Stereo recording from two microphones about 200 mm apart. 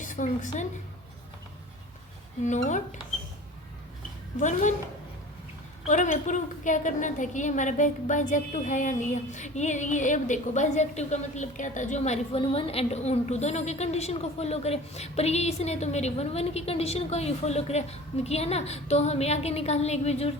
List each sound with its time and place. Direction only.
0.0 s a woman's voice: 40° left (ahead or behind)
2.4 s a woman's voice: 35° left (ahead or behind)
4.4 s a woman's voice: 35° left (ahead or behind)
5.9 s a woman's voice: 40° left (ahead or behind)